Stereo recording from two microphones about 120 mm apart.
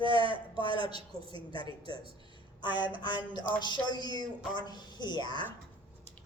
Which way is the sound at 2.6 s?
40° left (ahead or behind).